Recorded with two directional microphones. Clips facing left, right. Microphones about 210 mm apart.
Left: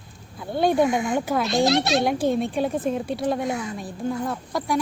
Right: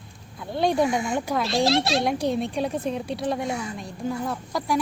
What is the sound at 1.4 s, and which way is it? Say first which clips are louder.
Speech: even; 30° right (ahead or behind).